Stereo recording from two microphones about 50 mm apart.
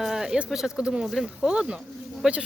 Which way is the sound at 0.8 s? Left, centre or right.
Centre.